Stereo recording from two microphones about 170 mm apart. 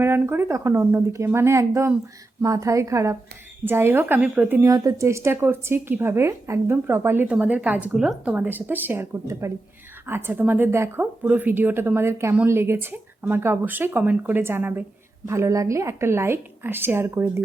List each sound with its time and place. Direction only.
0.0 s speech: 15° right (ahead or behind)